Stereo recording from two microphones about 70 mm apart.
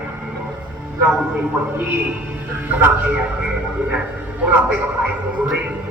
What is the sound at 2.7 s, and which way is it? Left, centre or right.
Speech, right.